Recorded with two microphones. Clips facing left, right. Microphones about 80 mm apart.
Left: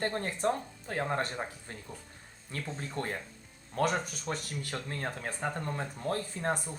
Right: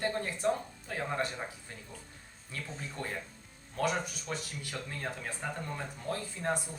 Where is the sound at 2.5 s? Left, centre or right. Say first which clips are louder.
Left 4 dB; left.